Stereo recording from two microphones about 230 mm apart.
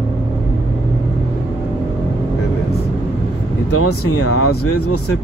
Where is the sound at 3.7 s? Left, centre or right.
Left.